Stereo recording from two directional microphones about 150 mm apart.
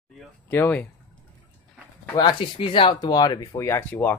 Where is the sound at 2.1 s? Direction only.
30° left (ahead or behind).